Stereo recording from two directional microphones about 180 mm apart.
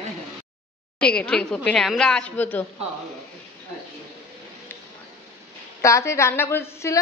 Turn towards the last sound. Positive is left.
turn(degrees=15)  # may be behind; listen again after turning